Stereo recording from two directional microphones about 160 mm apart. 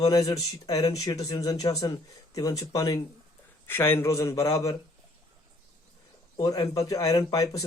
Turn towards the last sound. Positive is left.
turn(degrees=20)  # may be behind; listen again after turning